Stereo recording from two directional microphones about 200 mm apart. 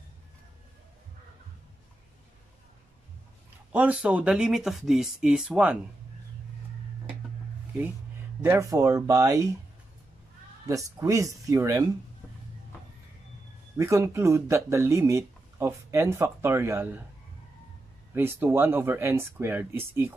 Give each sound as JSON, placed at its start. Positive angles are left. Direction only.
{"t": 3.7, "sound": "speech", "side_deg": -5}
{"t": 8.4, "sound": "speech", "side_deg": -15}
{"t": 10.7, "sound": "speech", "side_deg": -15}
{"t": 13.7, "sound": "speech", "side_deg": -15}
{"t": 18.1, "sound": "speech", "side_deg": -10}